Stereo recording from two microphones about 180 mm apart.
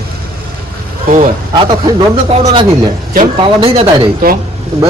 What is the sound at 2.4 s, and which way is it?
A man's voice, 30° right (ahead or behind).